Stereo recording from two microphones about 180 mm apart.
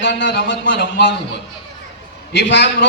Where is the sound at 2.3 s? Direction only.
75° left (ahead or behind).